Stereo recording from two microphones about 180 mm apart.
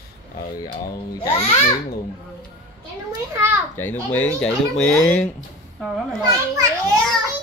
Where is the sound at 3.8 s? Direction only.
10° left (ahead or behind).